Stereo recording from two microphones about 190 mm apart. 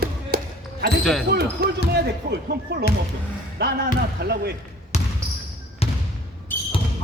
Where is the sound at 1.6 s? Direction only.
60° right (ahead or behind).